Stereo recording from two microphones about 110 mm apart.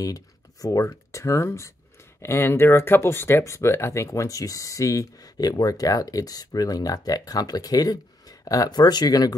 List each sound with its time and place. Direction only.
0.0 s speech: 30° left (ahead or behind)